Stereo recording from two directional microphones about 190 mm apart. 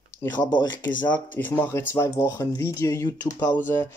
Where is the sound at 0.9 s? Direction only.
25° left (ahead or behind).